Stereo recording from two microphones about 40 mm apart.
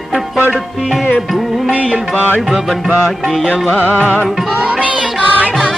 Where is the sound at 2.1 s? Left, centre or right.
Left.